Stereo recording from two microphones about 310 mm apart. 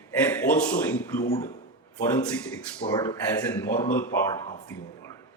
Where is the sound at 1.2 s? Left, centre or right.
Left.